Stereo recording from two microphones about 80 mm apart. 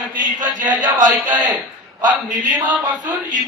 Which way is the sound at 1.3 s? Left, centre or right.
Right.